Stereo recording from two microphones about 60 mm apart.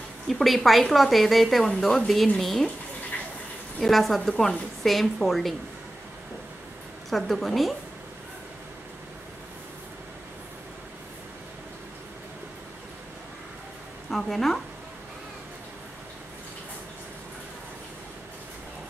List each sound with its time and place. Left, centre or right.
0.3 s a woman's voice: centre
3.8 s a woman's voice: centre
7.1 s a woman's voice: centre
14.1 s a woman's voice: centre